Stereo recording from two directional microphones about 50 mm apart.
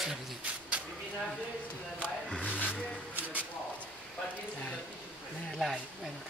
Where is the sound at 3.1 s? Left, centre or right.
Right.